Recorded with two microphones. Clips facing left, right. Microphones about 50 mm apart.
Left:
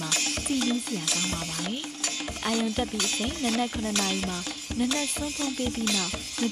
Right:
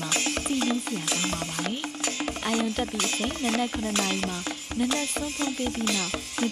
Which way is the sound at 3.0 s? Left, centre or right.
Right.